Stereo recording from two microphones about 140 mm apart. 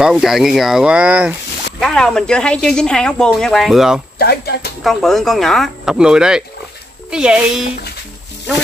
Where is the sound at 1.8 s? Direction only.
5° left (ahead or behind).